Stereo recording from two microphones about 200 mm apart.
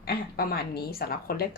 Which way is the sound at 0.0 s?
50° left (ahead or behind).